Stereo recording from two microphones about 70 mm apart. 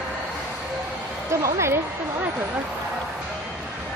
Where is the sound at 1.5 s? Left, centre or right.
Right.